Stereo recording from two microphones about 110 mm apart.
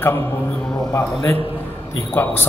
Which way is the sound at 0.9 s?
20° left (ahead or behind).